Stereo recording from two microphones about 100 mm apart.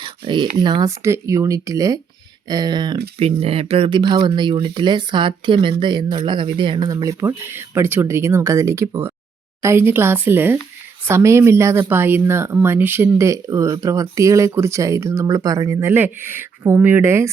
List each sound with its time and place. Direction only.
0.0 s a sound: 50° right (ahead or behind)
0.6 s speech: 45° right (ahead or behind)
0.9 s speech: 30° right (ahead or behind)
2.5 s speech: 45° right (ahead or behind)
3.2 s speech: 80° right
3.8 s speech: 50° right (ahead or behind); by 17.2 s 25° right (ahead or behind)